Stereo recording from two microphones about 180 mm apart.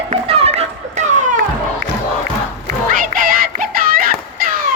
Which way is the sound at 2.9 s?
50° right (ahead or behind).